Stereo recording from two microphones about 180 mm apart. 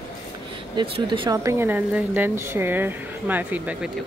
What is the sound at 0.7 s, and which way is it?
Speech, 30° right (ahead or behind).